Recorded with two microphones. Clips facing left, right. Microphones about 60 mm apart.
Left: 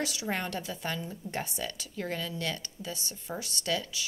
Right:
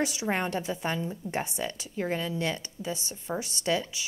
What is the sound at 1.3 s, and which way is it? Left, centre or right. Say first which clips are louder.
A woman's voice: right 2 dB; right.